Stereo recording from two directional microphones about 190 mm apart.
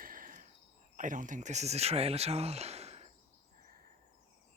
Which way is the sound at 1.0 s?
45° right (ahead or behind).